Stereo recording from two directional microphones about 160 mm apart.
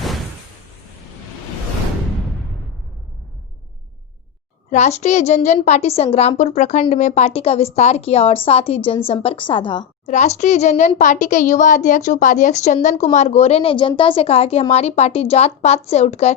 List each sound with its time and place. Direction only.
4.7 s a woman's voice: 45° left (ahead or behind)
10.1 s a woman's voice: 45° left (ahead or behind)